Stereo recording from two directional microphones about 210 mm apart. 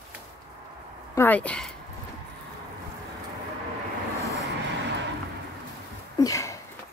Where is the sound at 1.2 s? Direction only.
5° left (ahead or behind).